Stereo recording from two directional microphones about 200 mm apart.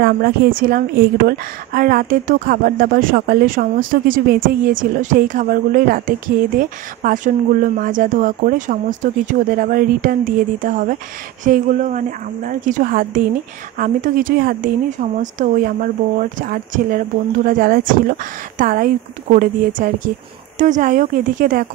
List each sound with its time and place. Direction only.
0.0 s a woman's voice: 45° right (ahead or behind)